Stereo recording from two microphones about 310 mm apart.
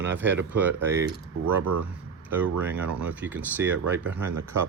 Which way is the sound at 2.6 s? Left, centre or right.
Centre.